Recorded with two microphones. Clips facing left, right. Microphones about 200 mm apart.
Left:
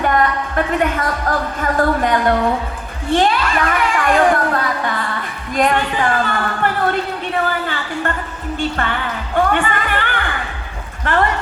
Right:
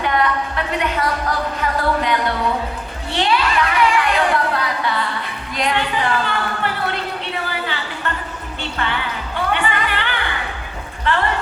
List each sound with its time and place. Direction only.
0.0 s a woman's voice: 45° left (ahead or behind)
3.1 s a sound: 45° left (ahead or behind)
8.7 s music: 50° left (ahead or behind)
11.1 s speech: 50° left (ahead or behind)